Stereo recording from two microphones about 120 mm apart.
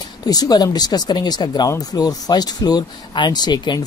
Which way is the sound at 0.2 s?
35° left (ahead or behind).